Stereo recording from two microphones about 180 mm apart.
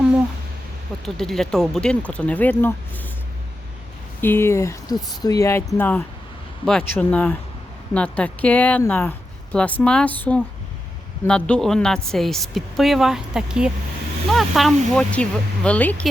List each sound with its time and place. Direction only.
1.0 s a woman's voice: 5° left (ahead or behind)
4.2 s a woman's voice: 15° left (ahead or behind)